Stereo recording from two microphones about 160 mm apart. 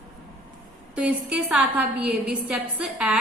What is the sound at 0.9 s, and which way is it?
A woman's voice, 5° right (ahead or behind).